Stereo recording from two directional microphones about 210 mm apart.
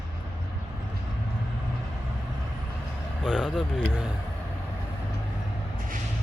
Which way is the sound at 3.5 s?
Centre (ahead or behind).